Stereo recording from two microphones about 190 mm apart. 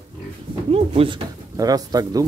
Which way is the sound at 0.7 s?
30° right (ahead or behind).